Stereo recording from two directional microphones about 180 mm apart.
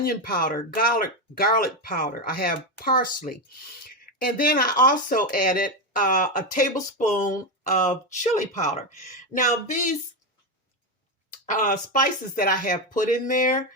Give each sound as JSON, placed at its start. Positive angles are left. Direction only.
{"t": 0.0, "sound": "speech", "side_deg": 55}
{"t": 11.4, "sound": "speech", "side_deg": 50}